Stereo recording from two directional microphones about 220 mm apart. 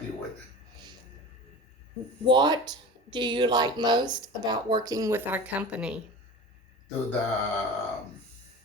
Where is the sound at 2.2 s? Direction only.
20° right (ahead or behind).